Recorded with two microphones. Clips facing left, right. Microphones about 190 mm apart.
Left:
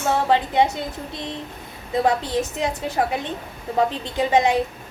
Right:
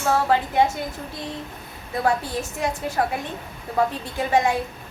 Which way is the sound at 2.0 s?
20° left (ahead or behind).